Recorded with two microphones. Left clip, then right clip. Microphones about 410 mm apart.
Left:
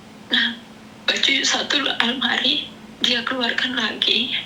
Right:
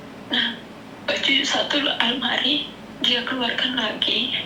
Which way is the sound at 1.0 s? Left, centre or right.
Left.